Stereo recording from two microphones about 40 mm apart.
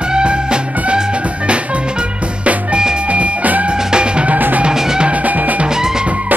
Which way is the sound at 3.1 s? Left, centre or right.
Right.